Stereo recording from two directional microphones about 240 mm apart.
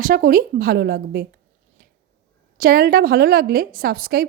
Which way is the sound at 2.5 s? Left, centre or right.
Right.